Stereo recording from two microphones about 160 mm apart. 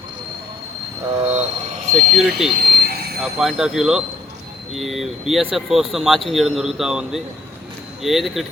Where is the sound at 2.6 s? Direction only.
90° right.